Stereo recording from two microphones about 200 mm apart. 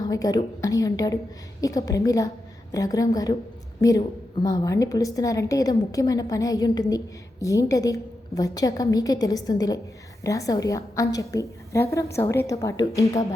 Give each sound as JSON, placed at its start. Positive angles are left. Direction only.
{"t": 0.0, "sound": "a woman's voice", "side_deg": 20}